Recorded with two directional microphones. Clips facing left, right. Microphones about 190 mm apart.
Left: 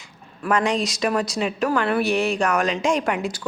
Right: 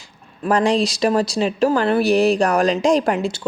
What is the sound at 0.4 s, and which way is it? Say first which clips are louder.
Speech: right 4 dB; 35° right (ahead or behind).